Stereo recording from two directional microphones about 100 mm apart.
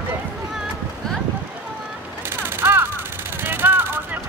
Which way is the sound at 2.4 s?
25° right (ahead or behind).